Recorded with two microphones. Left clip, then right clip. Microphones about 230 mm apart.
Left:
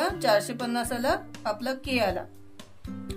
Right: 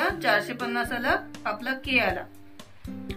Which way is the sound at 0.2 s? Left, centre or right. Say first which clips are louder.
Even; left.